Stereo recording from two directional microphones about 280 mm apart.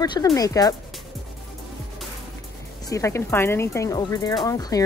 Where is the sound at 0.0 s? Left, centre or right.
Centre.